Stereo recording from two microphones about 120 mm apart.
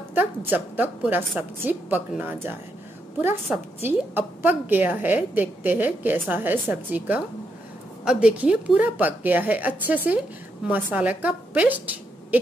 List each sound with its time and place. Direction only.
0.1 s a woman's voice: 15° right (ahead or behind)